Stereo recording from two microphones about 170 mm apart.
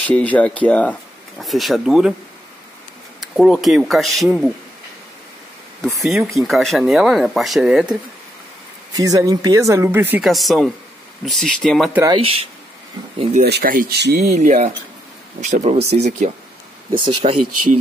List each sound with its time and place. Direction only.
0.0 s speech: 10° left (ahead or behind)
3.3 s speech: centre (ahead or behind)
5.8 s speech: centre (ahead or behind)
8.9 s speech: 20° right (ahead or behind)
10.2 s speech: centre (ahead or behind)
12.0 s speech: 30° right (ahead or behind)
13.4 s speech: 65° right (ahead or behind)
14.2 s speech: 45° right (ahead or behind)